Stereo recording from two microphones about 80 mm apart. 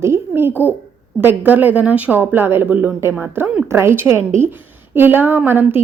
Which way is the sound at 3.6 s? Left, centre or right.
Right.